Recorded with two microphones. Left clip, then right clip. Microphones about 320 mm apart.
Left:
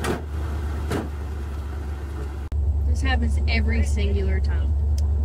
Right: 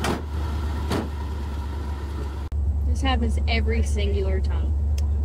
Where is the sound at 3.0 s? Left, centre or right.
Centre.